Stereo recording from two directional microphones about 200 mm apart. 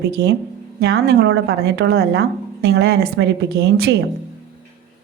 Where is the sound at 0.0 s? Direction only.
55° right (ahead or behind).